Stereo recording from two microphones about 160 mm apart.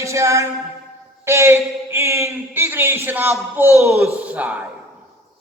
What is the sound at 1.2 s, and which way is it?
A man's voice, 15° right (ahead or behind).